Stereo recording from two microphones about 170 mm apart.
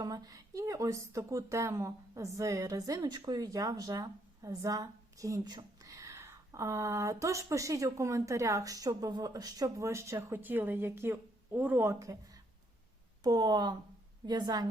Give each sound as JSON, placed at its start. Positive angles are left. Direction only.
{"t": 0.0, "sound": "speech", "side_deg": -20}